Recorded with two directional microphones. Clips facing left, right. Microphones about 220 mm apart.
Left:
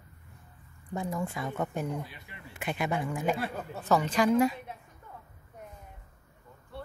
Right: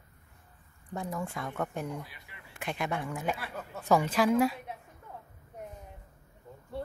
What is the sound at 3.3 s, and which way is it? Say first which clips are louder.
Speech: left 6 dB; 30° left (ahead or behind).